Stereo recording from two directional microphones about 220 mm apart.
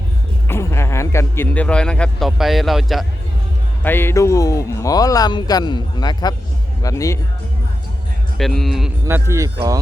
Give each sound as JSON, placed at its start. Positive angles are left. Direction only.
{"t": 0.4, "sound": "a man's voice", "side_deg": 10}
{"t": 3.8, "sound": "speech", "side_deg": 10}
{"t": 8.4, "sound": "speech", "side_deg": 0}
{"t": 9.0, "sound": "speech", "side_deg": -10}